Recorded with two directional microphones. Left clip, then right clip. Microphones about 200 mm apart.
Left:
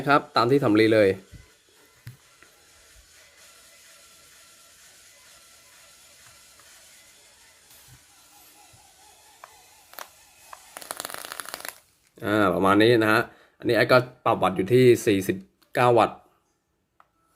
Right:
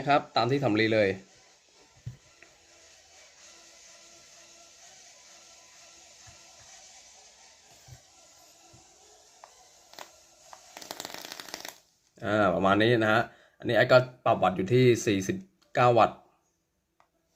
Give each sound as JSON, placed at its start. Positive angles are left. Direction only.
{"t": 0.0, "sound": "speech", "side_deg": 25}
{"t": 10.8, "sound": "a sound", "side_deg": 10}
{"t": 12.2, "sound": "speech", "side_deg": 25}